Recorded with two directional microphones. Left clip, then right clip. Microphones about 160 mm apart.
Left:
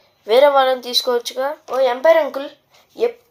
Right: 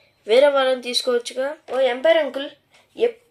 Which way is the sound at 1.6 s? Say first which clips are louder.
Left 4 dB; 20° right (ahead or behind).